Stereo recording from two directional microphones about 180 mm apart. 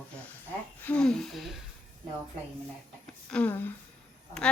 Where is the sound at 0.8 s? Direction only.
5° left (ahead or behind).